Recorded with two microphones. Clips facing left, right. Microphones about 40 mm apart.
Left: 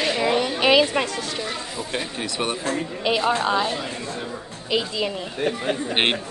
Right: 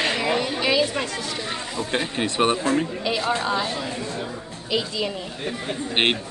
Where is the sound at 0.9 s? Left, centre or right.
Left.